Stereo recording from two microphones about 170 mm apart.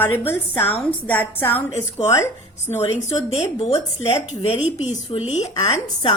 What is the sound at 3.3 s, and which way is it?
A woman's voice, 35° left (ahead or behind).